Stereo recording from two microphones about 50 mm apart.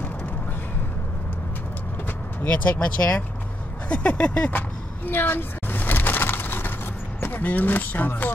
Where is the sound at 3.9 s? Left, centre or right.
Left.